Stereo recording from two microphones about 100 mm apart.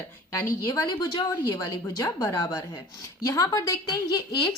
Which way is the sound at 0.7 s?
40° left (ahead or behind).